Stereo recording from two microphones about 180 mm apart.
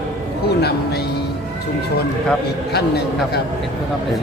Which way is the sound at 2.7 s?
65° left (ahead or behind).